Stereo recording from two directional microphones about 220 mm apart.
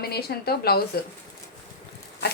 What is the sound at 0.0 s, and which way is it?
Speech, 45° left (ahead or behind).